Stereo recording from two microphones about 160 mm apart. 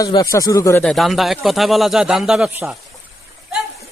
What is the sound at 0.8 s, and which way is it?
A man's voice, centre (ahead or behind).